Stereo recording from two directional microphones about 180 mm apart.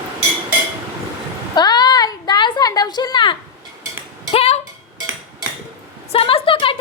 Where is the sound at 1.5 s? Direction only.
20° left (ahead or behind).